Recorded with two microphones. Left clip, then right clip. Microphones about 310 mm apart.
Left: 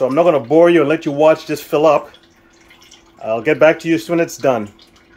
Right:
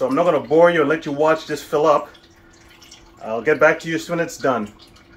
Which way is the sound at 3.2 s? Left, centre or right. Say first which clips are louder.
Left 4 dB; left.